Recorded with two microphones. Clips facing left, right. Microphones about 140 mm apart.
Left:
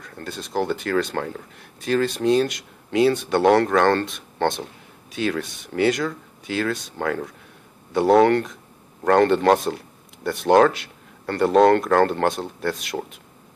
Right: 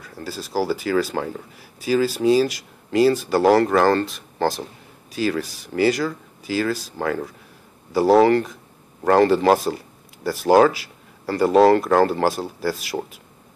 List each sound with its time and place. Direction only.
0.0 s speech: 5° right (ahead or behind)